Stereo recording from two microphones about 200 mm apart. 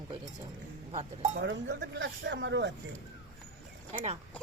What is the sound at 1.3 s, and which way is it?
Speech, 60° right (ahead or behind).